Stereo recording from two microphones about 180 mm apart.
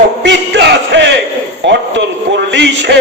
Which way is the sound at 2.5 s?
75° right (ahead or behind).